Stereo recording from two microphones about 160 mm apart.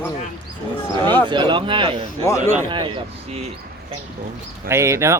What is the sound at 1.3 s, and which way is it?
Speech, 30° right (ahead or behind).